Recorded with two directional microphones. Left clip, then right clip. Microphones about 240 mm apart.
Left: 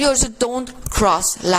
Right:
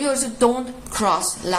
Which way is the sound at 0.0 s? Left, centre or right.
Left.